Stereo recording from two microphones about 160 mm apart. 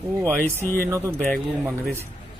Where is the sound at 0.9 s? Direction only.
15° right (ahead or behind).